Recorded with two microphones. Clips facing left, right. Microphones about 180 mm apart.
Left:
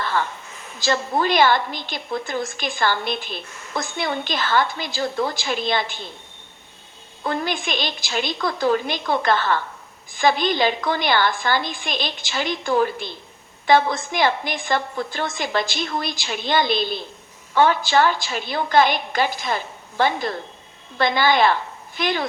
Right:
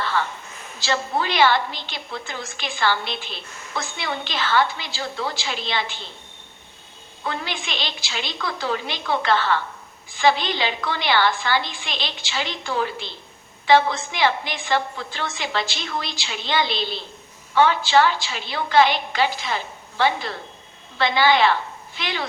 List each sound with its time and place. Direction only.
0.0 s a sound: 45° left (ahead or behind)
0.8 s a woman's voice: 45° left (ahead or behind)
7.3 s a woman's voice: 45° left (ahead or behind)